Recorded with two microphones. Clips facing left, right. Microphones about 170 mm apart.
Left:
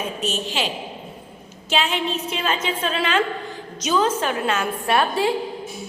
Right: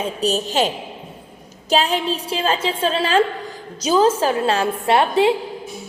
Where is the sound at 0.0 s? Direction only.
35° right (ahead or behind).